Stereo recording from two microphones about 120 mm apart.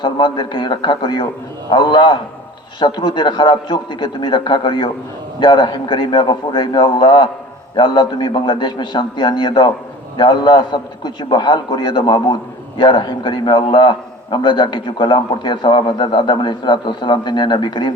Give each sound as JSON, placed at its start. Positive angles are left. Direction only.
{"t": 0.0, "sound": "a man's voice", "side_deg": 40}